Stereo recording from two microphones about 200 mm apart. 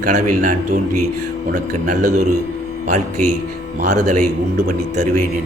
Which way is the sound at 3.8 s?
35° right (ahead or behind).